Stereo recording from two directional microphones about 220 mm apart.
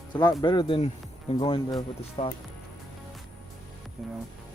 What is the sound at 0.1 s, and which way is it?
Speech, 20° left (ahead or behind).